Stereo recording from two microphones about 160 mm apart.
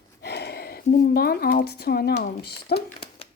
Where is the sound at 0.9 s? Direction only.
70° left (ahead or behind); by 2.8 s 90° left.